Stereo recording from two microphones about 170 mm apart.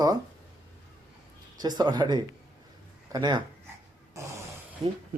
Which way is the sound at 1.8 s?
25° right (ahead or behind).